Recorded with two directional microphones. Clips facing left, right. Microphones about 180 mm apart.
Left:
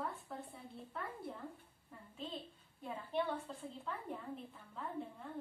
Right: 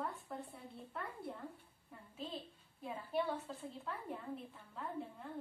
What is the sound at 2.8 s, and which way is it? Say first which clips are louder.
A woman's voice: even; 5° right (ahead or behind).